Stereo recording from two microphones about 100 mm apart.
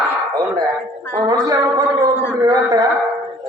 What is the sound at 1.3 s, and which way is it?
Speech, 45° right (ahead or behind).